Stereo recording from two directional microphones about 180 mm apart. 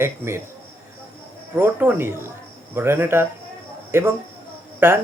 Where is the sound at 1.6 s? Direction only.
10° right (ahead or behind).